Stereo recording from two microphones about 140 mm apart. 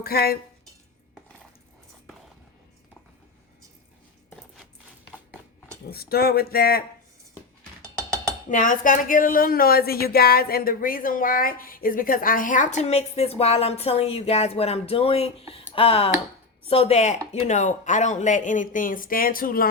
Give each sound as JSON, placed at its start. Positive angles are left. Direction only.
{"t": 0.0, "sound": "speech", "side_deg": 90}
{"t": 5.9, "sound": "speech", "side_deg": 90}
{"t": 7.8, "sound": "a sound", "side_deg": -20}
{"t": 8.4, "sound": "speech", "side_deg": 70}